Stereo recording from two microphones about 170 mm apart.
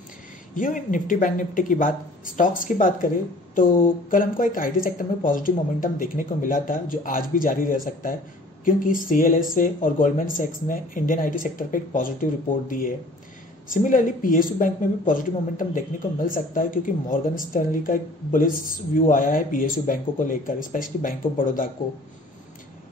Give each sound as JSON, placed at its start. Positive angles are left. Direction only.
{"t": 0.6, "sound": "a woman's voice", "side_deg": 50}